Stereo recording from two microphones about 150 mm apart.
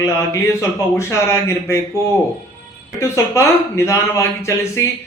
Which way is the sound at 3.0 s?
20° left (ahead or behind).